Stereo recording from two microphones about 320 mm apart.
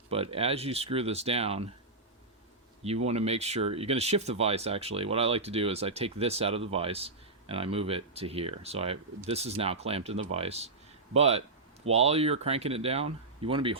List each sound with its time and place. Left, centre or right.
0.1 s speech: centre
2.8 s speech: centre